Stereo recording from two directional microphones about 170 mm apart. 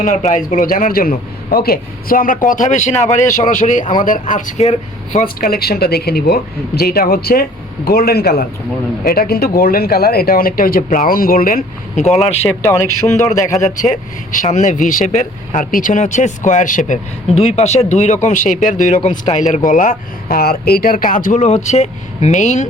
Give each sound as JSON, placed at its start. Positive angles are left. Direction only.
{"t": 0.0, "sound": "a man's voice", "side_deg": 45}
{"t": 5.5, "sound": "speech", "side_deg": 65}
{"t": 12.6, "sound": "speech", "side_deg": 15}
{"t": 13.1, "sound": "a man's voice", "side_deg": 45}
{"t": 17.2, "sound": "a man's voice", "side_deg": 35}